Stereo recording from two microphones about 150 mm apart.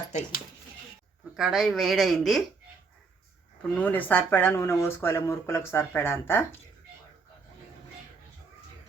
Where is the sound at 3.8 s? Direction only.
10° left (ahead or behind).